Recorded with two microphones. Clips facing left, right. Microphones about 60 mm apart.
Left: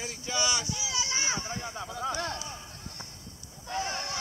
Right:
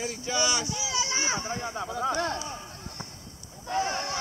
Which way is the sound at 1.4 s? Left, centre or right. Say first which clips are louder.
Right 5 dB; right.